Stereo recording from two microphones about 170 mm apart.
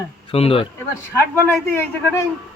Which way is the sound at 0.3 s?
35° left (ahead or behind).